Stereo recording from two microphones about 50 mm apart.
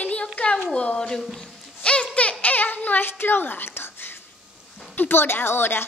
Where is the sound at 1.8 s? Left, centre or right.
Left.